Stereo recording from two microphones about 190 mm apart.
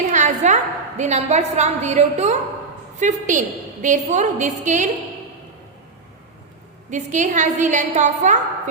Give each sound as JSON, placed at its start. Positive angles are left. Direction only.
{"t": 0.0, "sound": "a woman's voice", "side_deg": -40}
{"t": 6.9, "sound": "a woman's voice", "side_deg": -40}